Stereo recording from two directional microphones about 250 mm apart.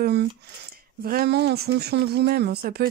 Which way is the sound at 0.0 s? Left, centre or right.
Right.